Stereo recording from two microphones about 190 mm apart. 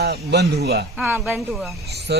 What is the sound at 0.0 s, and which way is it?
Speech, 60° right (ahead or behind).